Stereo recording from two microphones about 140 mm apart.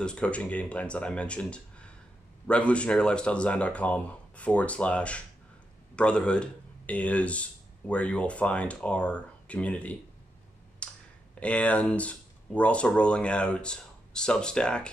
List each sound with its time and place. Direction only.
0.0 s speech: 5° left (ahead or behind)
10.8 s clicking: 5° left (ahead or behind)
11.3 s speech: 10° left (ahead or behind)